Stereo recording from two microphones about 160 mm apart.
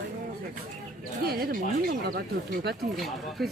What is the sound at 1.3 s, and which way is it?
Speech, 75° right (ahead or behind).